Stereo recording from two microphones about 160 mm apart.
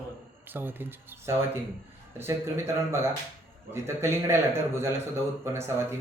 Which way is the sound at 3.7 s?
15° right (ahead or behind).